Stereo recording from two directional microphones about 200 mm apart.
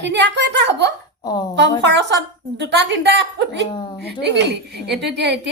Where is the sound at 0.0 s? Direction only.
60° right (ahead or behind).